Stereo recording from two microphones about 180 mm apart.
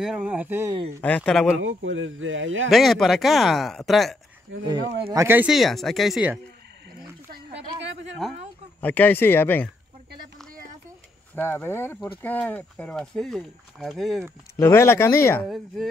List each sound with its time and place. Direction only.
0.0 s speech: 5° right (ahead or behind)
1.0 s speech: 5° left (ahead or behind)
1.6 s speech: 90° right
2.7 s speech: centre (ahead or behind)
4.6 s speech: 20° right (ahead or behind); by 6.4 s 5° right (ahead or behind)
7.2 s a sound: 60° right (ahead or behind)
8.8 s speech: 10° left (ahead or behind)
11.3 s speech: 10° left (ahead or behind)
14.6 s speech: 15° left (ahead or behind)
15.4 s speech: centre (ahead or behind)